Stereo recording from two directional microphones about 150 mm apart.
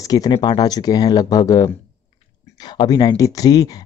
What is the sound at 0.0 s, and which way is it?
Speech, 25° left (ahead or behind).